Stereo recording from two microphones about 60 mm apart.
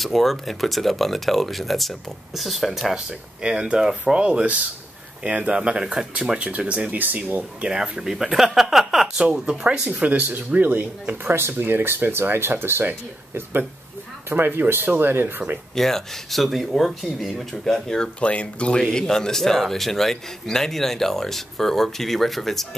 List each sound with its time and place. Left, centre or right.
0.0 s speech: centre
7.0 s speech: right
7.6 s speech: centre; by 15.6 s right
15.7 s speech: centre